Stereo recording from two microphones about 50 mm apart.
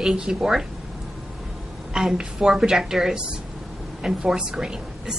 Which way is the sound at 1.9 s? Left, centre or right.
Centre.